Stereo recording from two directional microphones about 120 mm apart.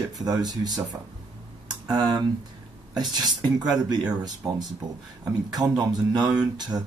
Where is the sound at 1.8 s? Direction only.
35° right (ahead or behind).